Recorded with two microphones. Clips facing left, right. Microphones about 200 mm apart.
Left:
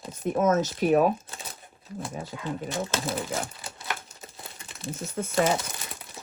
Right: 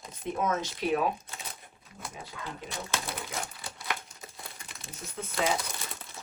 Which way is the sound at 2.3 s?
25° left (ahead or behind).